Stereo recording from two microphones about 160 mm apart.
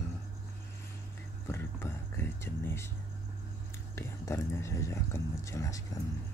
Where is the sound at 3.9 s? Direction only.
20° left (ahead or behind).